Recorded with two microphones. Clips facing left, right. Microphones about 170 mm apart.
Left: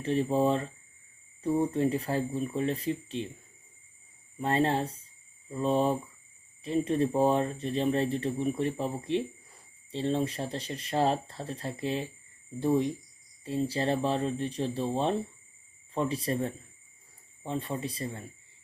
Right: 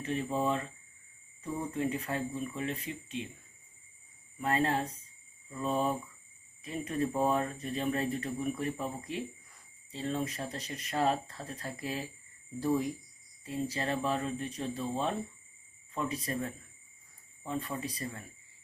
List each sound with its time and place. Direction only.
0.0 s speech: 35° left (ahead or behind)
4.4 s speech: 30° left (ahead or behind)